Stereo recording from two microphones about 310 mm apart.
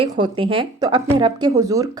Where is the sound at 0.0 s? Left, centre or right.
Centre.